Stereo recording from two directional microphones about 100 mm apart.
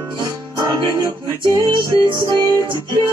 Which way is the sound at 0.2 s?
35° right (ahead or behind).